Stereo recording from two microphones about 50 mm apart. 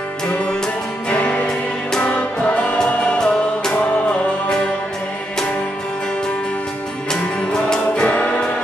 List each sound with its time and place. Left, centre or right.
1.1 s music: left
2.8 s music: centre
7.1 s music: centre